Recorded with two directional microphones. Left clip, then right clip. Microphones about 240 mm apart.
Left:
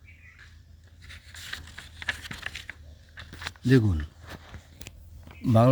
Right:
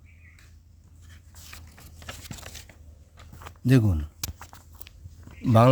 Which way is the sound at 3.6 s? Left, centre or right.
Right.